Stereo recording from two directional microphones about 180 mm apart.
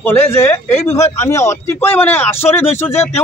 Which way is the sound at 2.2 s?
35° left (ahead or behind).